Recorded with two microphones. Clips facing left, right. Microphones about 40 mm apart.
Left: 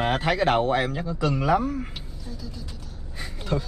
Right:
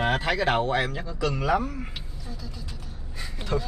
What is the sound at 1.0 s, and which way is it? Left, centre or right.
Speech, centre.